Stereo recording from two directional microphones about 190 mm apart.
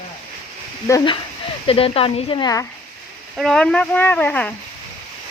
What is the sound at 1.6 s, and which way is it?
Speech, 30° left (ahead or behind).